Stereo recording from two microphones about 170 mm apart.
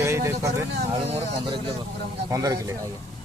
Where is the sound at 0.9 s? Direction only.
35° right (ahead or behind).